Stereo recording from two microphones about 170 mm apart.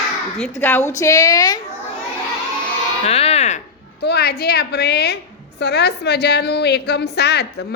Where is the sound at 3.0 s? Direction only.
35° left (ahead or behind).